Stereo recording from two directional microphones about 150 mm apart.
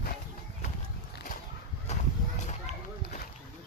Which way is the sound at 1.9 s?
50° left (ahead or behind).